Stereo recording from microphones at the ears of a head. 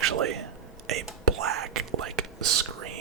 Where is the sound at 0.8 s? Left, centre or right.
Right.